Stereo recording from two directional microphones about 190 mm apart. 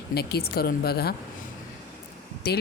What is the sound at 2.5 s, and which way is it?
Speech, 55° left (ahead or behind).